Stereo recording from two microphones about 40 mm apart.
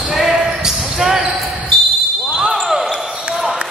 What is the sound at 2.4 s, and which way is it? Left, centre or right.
Basketball bounce, centre.